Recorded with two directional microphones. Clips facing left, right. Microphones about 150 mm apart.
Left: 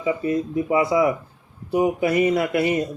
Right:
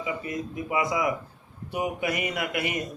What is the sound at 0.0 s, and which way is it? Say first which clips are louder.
Speech: left 9 dB; 30° left (ahead or behind).